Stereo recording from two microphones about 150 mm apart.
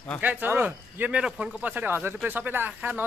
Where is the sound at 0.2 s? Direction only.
10° right (ahead or behind).